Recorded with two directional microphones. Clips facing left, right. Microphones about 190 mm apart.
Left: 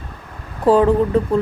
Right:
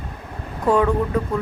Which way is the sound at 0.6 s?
30° left (ahead or behind).